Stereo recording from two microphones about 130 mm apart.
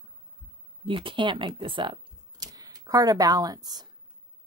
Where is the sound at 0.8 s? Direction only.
40° right (ahead or behind).